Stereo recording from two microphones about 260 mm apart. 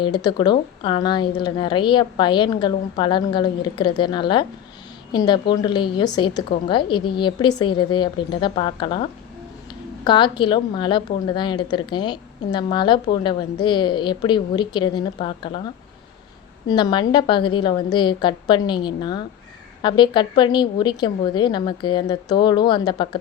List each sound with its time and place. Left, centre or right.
0.0 s a woman's voice: centre
16.6 s a woman's voice: centre